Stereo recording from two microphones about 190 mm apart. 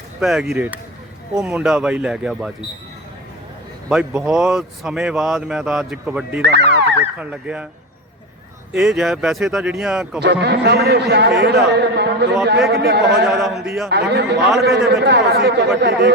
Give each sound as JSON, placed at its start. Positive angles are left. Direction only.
{"t": 0.2, "sound": "speech", "side_deg": 0}
{"t": 3.8, "sound": "speech", "side_deg": 0}
{"t": 6.4, "sound": "a sound", "side_deg": -60}
{"t": 7.0, "sound": "speech", "side_deg": -5}
{"t": 8.8, "sound": "speech", "side_deg": 0}
{"t": 10.2, "sound": "a man's voice", "side_deg": -60}
{"t": 13.2, "sound": "speech", "side_deg": 0}
{"t": 13.9, "sound": "a man's voice", "side_deg": -60}